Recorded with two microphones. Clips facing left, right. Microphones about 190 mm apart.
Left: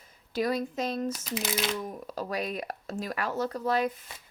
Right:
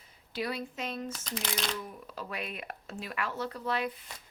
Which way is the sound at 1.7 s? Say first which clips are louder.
Left 6 dB; 45° left (ahead or behind).